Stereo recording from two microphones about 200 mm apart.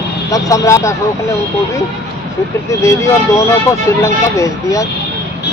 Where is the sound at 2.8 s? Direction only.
15° left (ahead or behind).